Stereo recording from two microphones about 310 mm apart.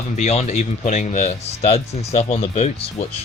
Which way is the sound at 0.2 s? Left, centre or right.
Left.